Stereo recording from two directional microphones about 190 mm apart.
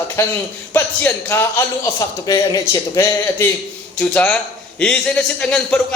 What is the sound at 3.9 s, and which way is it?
Speech, 5° left (ahead or behind).